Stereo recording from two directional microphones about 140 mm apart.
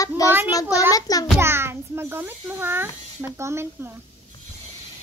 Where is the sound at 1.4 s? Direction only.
15° right (ahead or behind).